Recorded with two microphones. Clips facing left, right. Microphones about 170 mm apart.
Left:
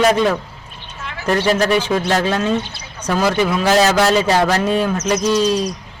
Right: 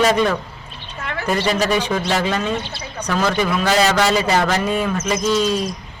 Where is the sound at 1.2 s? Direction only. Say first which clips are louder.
Left 3 dB; centre (ahead or behind).